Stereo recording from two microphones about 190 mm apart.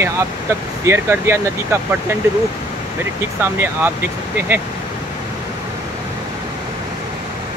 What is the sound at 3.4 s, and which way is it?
Speech, 10° right (ahead or behind).